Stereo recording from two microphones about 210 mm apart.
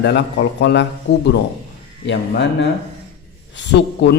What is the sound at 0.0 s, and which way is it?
A man's voice, 55° left (ahead or behind).